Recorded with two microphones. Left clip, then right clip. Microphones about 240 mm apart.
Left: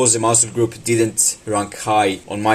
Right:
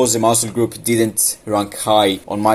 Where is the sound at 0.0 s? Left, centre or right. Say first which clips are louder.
Right 2 dB; centre.